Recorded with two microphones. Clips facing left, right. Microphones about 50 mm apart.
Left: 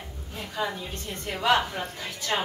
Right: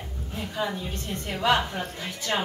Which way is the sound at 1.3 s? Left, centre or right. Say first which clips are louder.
Even; centre.